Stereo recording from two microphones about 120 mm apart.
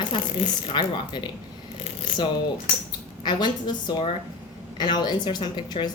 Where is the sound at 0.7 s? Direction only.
40° left (ahead or behind).